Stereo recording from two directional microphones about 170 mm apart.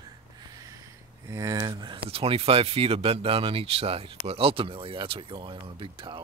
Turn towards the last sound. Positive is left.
turn(degrees=-30)  # may be behind; listen again after turning